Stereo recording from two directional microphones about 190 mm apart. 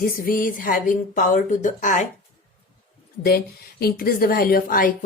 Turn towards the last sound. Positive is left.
turn(degrees=50)  # may be behind; listen again after turning